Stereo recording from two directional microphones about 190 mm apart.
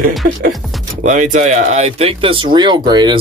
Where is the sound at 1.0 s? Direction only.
40° right (ahead or behind).